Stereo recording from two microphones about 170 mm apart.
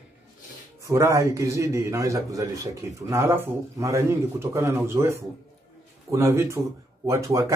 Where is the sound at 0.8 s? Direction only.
15° right (ahead or behind).